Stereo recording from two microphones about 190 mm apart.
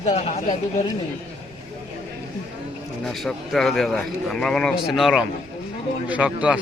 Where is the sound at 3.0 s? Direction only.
Centre (ahead or behind).